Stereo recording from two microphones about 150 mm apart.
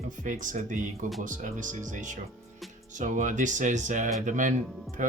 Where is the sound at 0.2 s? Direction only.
60° right (ahead or behind).